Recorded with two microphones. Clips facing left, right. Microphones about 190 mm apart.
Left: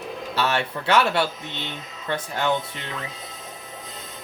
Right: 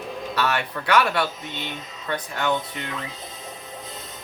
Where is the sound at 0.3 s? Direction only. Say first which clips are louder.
Left 1 dB; 25° left (ahead or behind).